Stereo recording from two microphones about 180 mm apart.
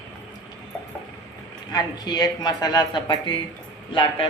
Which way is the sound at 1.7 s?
20° left (ahead or behind).